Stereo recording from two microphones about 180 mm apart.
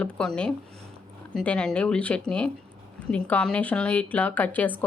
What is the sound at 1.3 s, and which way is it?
A woman's voice, 5° left (ahead or behind).